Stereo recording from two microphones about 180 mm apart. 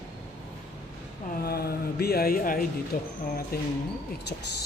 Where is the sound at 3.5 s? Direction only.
60° left (ahead or behind).